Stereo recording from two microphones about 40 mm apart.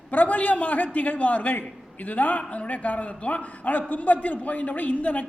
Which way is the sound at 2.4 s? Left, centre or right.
Left.